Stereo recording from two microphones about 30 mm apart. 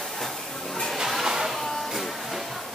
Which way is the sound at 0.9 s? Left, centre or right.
Centre.